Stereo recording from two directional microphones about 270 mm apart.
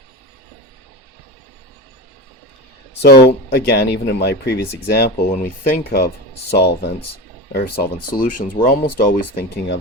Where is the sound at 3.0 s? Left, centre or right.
Left.